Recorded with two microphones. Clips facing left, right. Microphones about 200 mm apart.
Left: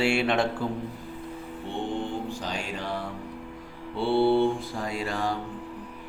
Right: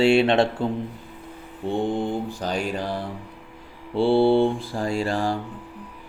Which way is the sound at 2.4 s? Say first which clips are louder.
Right 6 dB; 40° right (ahead or behind).